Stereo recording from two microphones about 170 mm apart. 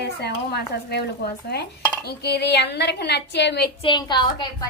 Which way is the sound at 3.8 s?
25° left (ahead or behind).